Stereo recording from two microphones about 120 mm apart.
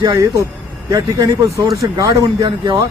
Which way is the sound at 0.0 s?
30° right (ahead or behind).